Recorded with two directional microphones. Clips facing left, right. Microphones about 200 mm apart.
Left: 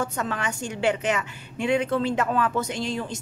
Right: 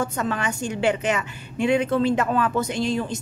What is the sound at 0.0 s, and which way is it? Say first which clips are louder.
A woman's voice: right 3 dB; 20° right (ahead or behind).